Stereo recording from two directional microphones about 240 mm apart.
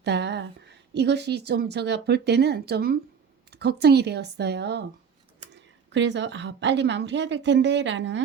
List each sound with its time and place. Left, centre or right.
0.0 s a woman's voice: right